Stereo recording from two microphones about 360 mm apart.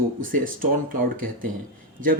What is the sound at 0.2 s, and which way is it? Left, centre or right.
Speech, right.